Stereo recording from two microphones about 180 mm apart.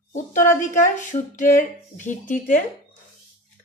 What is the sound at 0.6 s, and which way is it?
Speech, 45° left (ahead or behind).